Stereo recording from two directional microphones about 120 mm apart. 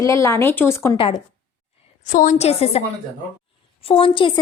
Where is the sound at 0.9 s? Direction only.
45° left (ahead or behind).